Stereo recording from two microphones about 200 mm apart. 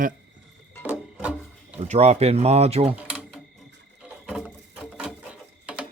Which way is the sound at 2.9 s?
5° right (ahead or behind).